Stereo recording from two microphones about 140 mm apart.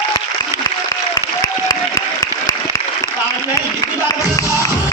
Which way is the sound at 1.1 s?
25° left (ahead or behind).